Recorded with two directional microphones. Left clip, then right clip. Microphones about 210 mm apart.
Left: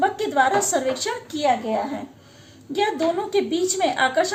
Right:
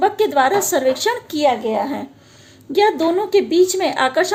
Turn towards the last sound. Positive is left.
turn(degrees=-45)  # may be behind; listen again after turning